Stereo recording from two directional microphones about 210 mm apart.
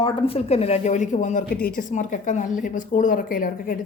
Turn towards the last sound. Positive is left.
turn(degrees=40)  # may be behind; listen again after turning